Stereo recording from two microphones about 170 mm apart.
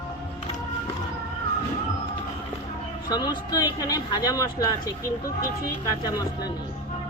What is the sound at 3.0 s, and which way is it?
Speech, 25° left (ahead or behind).